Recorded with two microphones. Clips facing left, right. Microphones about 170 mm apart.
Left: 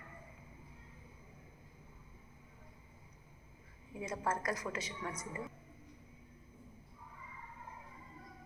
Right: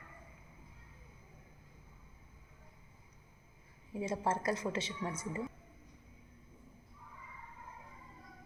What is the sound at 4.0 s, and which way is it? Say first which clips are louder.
A woman's voice: right 3 dB; 30° right (ahead or behind).